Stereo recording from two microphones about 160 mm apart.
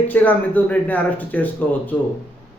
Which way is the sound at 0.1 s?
10° left (ahead or behind).